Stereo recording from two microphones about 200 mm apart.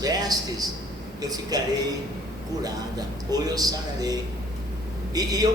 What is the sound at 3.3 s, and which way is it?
A man's voice, 20° right (ahead or behind).